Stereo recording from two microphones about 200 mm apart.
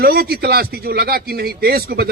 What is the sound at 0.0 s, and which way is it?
A man's voice, 50° right (ahead or behind).